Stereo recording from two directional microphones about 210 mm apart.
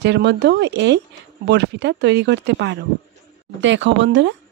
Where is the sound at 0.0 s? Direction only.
55° right (ahead or behind).